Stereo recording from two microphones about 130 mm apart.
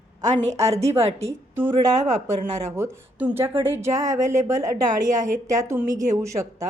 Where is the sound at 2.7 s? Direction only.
20° right (ahead or behind).